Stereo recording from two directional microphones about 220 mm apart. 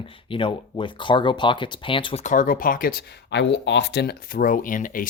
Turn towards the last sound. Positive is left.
turn(degrees=40)  # may be behind; listen again after turning